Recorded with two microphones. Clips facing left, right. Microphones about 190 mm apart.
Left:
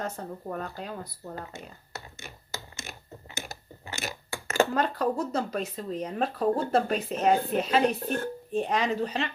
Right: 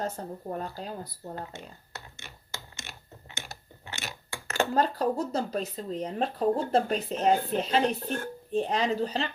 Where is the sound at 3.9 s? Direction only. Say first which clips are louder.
Left 4 dB; 40° left (ahead or behind).